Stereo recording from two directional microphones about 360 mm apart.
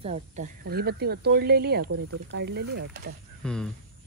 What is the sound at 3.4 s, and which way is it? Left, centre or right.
Speech, centre.